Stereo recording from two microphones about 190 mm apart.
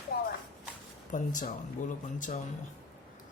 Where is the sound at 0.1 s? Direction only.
50° left (ahead or behind).